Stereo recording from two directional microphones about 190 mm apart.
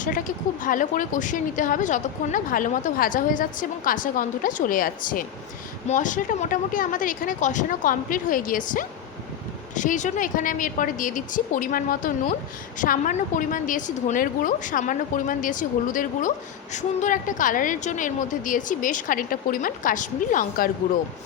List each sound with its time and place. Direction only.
0.0 s speech: 45° left (ahead or behind)